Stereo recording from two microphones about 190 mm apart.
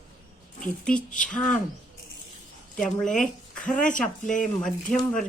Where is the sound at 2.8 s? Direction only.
5° left (ahead or behind).